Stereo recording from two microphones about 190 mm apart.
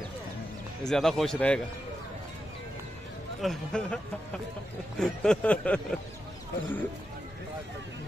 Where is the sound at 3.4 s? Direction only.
5° left (ahead or behind).